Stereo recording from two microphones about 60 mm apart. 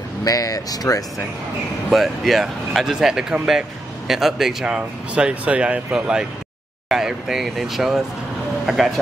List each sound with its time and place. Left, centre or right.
0.2 s speech: left
1.9 s speech: centre
4.7 s speech: centre